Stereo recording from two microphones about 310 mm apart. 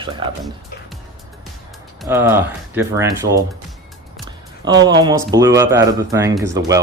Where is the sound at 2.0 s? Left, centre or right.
Centre.